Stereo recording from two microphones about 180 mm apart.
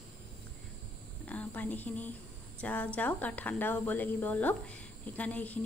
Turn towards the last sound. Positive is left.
turn(degrees=10)  # may be behind; listen again after turning